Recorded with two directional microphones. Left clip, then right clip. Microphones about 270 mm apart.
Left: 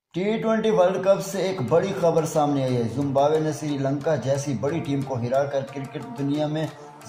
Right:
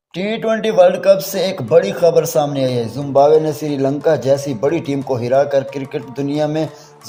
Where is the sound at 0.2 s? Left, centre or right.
Right.